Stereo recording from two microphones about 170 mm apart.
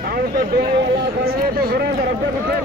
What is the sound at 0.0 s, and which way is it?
Speech, 65° right (ahead or behind).